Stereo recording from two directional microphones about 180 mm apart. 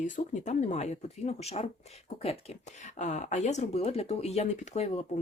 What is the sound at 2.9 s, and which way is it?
Speech, 40° left (ahead or behind).